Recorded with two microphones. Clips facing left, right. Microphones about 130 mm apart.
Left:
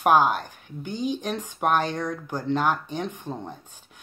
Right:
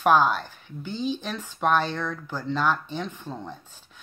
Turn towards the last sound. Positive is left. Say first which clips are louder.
# left 2 dB
turn(degrees=15)  # may be behind; listen again after turning